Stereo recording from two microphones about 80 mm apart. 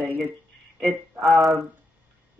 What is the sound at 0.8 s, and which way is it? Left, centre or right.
Music, centre.